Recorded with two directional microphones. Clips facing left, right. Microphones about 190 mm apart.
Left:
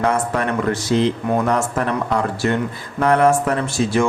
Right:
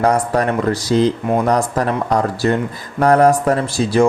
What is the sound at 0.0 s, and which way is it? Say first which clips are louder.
Speech: right 4 dB; 40° right (ahead or behind).